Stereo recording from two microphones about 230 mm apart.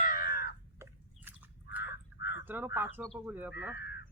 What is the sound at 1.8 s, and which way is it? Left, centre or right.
Crow, left.